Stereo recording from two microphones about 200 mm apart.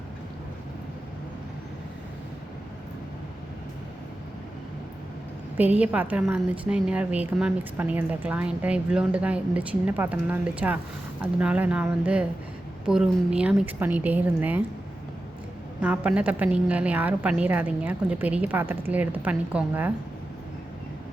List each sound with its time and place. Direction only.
5.5 s a woman's voice: 10° right (ahead or behind)
15.8 s a woman's voice: 5° right (ahead or behind)